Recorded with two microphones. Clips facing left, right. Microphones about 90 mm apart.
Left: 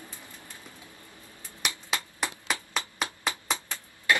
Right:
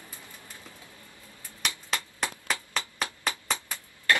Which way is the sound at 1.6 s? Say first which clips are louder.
Even; 10° left (ahead or behind).